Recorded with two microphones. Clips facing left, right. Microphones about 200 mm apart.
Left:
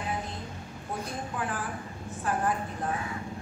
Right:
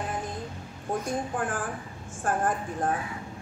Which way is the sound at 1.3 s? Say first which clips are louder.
Right 3 dB; 50° right (ahead or behind).